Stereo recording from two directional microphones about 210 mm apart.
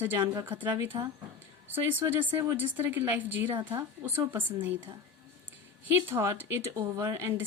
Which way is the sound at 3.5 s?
20° right (ahead or behind).